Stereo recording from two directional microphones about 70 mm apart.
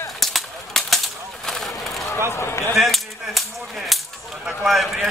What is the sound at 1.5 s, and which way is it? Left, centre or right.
Vehicle, centre.